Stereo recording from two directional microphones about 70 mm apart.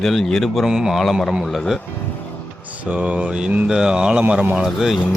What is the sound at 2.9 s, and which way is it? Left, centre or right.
Speech, centre.